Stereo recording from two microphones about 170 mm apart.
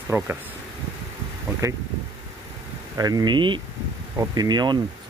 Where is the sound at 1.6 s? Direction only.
15° right (ahead or behind).